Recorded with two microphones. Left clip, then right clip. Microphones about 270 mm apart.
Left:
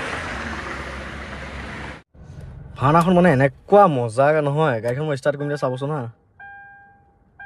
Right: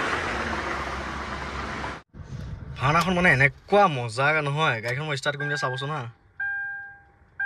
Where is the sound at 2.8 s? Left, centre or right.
Centre.